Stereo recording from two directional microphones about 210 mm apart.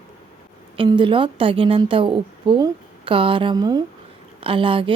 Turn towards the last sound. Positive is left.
turn(degrees=-25)  # may be behind; listen again after turning